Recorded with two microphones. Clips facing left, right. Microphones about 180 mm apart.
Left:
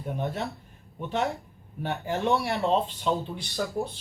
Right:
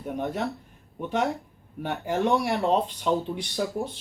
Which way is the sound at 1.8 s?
15° right (ahead or behind).